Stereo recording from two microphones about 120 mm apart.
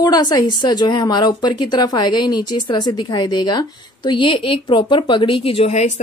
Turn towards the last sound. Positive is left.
turn(degrees=70)  # may be behind; listen again after turning